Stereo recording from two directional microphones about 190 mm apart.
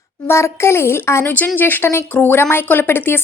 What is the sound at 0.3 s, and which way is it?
Speech, 15° left (ahead or behind).